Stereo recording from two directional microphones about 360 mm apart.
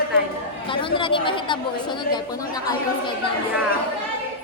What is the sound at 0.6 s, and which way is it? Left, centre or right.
A woman's voice, centre.